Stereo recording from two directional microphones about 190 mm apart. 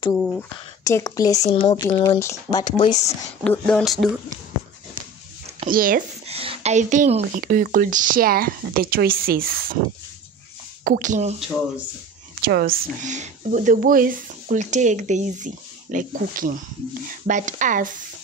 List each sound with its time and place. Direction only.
0.2 s speech: 5° left (ahead or behind)
0.8 s speech: 15° left (ahead or behind)
3.4 s speech: 5° left (ahead or behind)
5.7 s speech: 50° right (ahead or behind)
6.2 s speech: 30° right (ahead or behind); by 9.8 s 50° right (ahead or behind)
10.8 s speech: 45° right (ahead or behind)
12.4 s speech: 55° right (ahead or behind)
13.0 s speech: 40° right (ahead or behind)